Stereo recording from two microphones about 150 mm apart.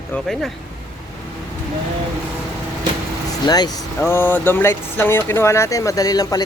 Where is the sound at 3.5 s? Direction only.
25° left (ahead or behind).